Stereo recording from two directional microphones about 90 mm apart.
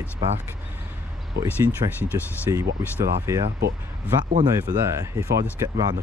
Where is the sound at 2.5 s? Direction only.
35° right (ahead or behind).